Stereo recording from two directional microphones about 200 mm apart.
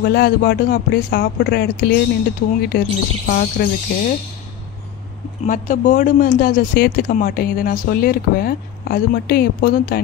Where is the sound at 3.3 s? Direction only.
45° left (ahead or behind).